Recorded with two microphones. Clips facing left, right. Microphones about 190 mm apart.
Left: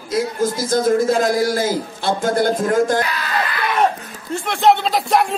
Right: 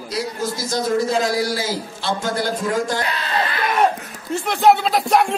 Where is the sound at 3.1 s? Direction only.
25° right (ahead or behind).